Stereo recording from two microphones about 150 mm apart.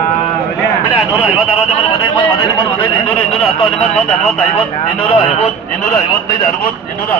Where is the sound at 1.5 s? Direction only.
35° left (ahead or behind).